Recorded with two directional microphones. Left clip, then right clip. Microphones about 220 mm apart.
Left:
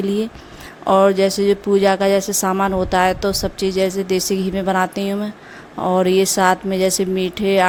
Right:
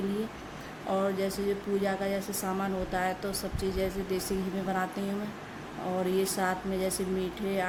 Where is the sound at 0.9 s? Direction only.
45° left (ahead or behind).